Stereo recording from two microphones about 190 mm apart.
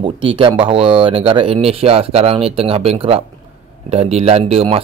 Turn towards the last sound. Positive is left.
turn(degrees=-30)  # may be behind; listen again after turning